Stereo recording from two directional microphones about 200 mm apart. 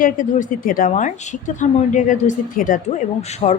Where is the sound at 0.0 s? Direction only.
40° left (ahead or behind).